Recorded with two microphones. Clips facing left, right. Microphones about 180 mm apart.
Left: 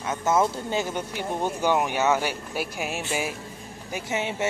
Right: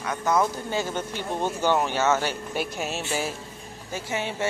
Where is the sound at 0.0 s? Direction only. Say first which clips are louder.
Left 1 dB; 20° left (ahead or behind).